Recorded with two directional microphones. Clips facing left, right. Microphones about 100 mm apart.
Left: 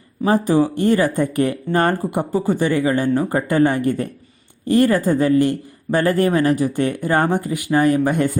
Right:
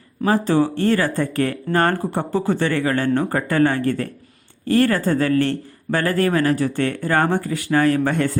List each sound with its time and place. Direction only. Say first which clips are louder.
0.3 s a man's voice: left 1 dB; 15° left (ahead or behind)